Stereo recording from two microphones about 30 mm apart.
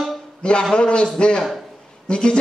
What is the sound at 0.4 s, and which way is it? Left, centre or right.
A man's voice, left.